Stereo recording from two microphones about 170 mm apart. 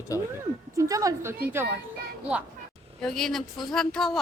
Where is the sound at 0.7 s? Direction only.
20° right (ahead or behind).